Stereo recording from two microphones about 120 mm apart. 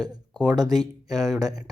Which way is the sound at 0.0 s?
35° right (ahead or behind).